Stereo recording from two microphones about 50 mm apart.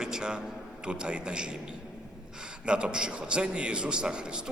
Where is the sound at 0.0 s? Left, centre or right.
Centre.